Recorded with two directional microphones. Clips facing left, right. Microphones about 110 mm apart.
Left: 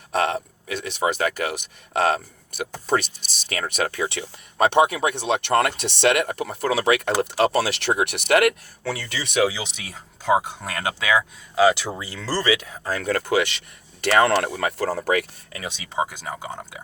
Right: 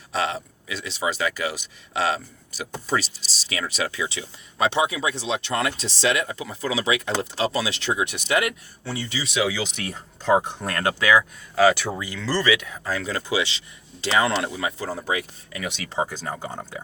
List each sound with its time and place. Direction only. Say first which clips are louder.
0.1 s speech: left 3 dB; 50° left (ahead or behind); by 9.2 s 80° left
9.2 s speech: left 4 dB; 50° left (ahead or behind)
10.7 s speech: right 3 dB; 15° left (ahead or behind)
11.9 s speech: right 1 dB; 30° left (ahead or behind); by 15.3 s 70° left (ahead or behind)
15.8 s speech: left 2 dB; 15° left (ahead or behind)